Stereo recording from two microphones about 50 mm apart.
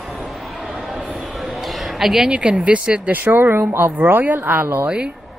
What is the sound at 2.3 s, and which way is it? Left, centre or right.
Speech, right.